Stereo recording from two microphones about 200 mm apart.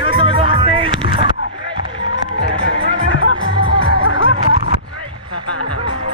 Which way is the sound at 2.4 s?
25° right (ahead or behind).